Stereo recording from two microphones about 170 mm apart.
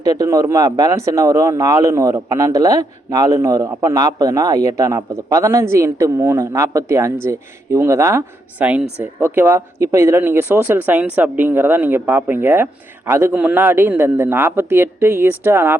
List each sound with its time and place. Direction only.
0.0 s a man's voice: 20° right (ahead or behind)